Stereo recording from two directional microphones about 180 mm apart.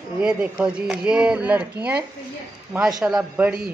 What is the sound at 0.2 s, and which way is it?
Speech, 5° right (ahead or behind).